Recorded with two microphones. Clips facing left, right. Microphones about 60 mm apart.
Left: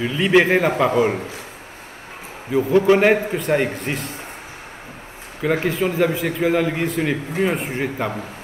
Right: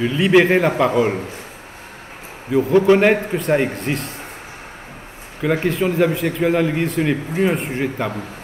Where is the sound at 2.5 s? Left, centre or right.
Centre.